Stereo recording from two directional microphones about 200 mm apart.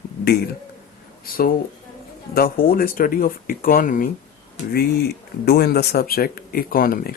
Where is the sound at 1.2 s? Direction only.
45° left (ahead or behind).